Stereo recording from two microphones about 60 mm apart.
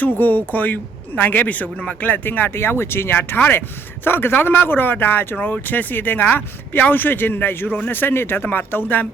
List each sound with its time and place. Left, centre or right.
0.0 s speech: left